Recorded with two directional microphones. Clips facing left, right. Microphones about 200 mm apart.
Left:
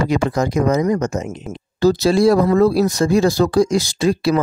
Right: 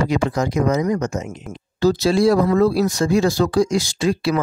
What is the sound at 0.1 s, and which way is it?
Speech, 45° left (ahead or behind).